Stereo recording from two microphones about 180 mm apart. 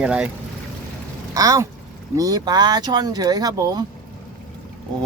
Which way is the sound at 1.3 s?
20° right (ahead or behind).